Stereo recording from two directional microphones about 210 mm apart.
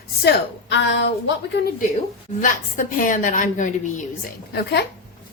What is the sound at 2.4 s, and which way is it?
A woman's voice, 40° left (ahead or behind).